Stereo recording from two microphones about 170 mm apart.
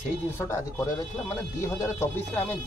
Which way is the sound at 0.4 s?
15° left (ahead or behind).